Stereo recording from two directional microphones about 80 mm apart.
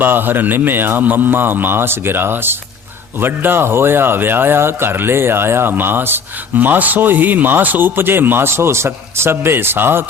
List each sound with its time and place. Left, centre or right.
0.0 s speech: right